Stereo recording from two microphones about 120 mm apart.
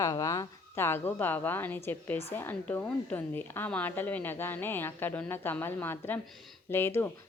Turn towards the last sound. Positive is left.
turn(degrees=20)  # may be behind; listen again after turning